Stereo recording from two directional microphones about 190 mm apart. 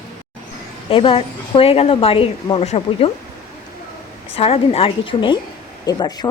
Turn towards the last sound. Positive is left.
turn(degrees=20)  # may be behind; listen again after turning